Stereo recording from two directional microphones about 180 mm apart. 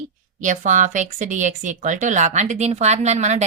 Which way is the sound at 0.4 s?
45° right (ahead or behind).